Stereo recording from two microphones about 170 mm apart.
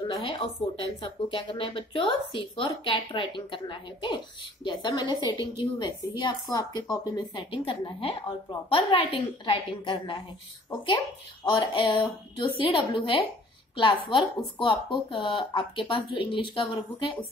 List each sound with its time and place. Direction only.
0.1 s speech: 30° left (ahead or behind)